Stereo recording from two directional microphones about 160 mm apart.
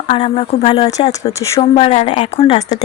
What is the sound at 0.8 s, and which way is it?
Speech, 20° left (ahead or behind).